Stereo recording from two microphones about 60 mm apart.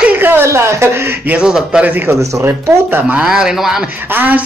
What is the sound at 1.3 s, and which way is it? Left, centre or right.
Speech, centre.